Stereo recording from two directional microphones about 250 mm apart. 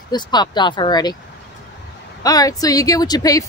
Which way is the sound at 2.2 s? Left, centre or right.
Centre.